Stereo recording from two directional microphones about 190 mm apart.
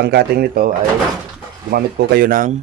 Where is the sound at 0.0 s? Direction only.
60° right (ahead or behind).